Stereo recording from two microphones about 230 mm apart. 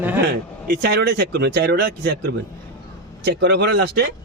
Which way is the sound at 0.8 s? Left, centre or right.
Right.